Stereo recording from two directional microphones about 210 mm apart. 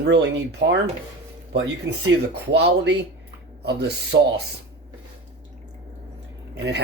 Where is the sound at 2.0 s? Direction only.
55° right (ahead or behind).